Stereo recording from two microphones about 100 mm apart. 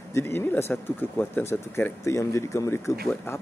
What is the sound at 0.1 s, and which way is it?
Speech, 25° left (ahead or behind).